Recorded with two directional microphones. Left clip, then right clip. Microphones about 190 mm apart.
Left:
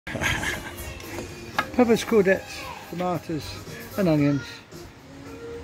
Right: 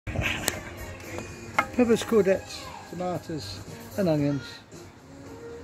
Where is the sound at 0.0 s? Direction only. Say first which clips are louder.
Left 4 dB; 25° left (ahead or behind).